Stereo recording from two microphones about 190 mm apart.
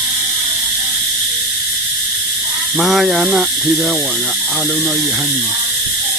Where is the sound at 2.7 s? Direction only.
Centre (ahead or behind).